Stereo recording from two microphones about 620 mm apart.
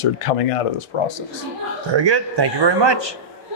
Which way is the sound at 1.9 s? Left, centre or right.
Right.